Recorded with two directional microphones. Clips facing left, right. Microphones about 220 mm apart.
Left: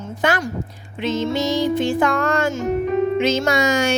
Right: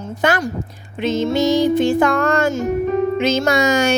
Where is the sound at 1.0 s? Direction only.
45° right (ahead or behind).